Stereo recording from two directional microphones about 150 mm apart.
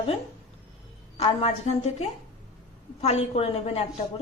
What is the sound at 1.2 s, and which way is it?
Speech, 45° left (ahead or behind).